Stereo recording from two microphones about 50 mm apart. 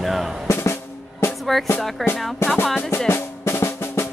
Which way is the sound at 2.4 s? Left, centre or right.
Left.